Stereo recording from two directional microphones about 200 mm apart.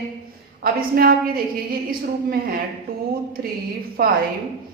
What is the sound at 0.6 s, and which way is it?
A woman's voice, 45° right (ahead or behind).